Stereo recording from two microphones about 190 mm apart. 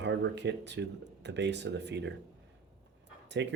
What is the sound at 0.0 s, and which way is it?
Speech, 65° right (ahead or behind).